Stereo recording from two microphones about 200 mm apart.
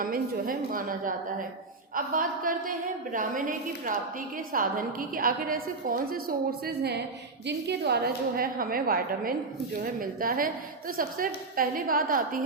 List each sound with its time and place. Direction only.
0.0 s a woman's voice: 45° right (ahead or behind)